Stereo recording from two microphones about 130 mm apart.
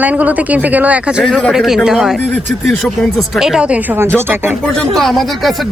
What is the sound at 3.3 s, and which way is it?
Speech, 5° right (ahead or behind).